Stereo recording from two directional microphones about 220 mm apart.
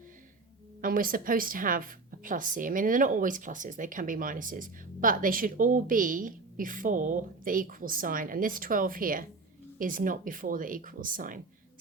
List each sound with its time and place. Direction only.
0.8 s a woman's voice: 40° right (ahead or behind)